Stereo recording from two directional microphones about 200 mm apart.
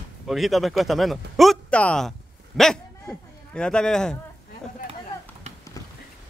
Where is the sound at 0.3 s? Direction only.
Centre (ahead or behind).